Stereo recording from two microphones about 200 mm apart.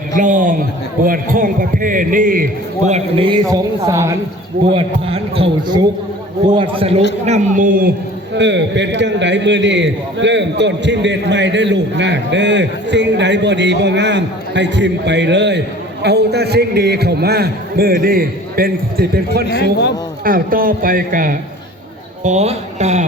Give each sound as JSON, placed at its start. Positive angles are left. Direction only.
{"t": 0.2, "sound": "a man's voice", "side_deg": -40}
{"t": 3.5, "sound": "a woman's voice", "side_deg": -15}
{"t": 4.7, "sound": "a man's voice", "side_deg": -30}
{"t": 7.3, "sound": "speech", "side_deg": -40}
{"t": 8.4, "sound": "a man's voice", "side_deg": -60}
{"t": 19.5, "sound": "a man's voice", "side_deg": 55}
{"t": 20.2, "sound": "a man's voice", "side_deg": -45}